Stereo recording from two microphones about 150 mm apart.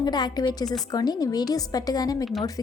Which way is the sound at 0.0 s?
30° left (ahead or behind).